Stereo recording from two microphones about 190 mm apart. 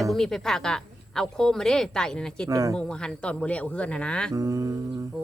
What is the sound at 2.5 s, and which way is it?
Speech, 20° right (ahead or behind).